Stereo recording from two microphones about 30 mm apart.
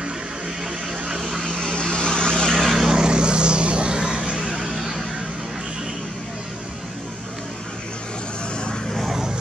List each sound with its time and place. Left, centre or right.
1.6 s vehicle: left
2.5 s vehicle: centre
2.9 s vehicle: right
4.6 s vehicle: centre